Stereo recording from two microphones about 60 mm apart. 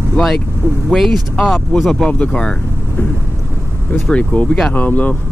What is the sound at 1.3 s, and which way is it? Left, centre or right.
Speech, centre.